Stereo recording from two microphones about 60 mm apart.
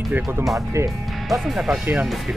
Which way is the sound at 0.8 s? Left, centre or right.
Right.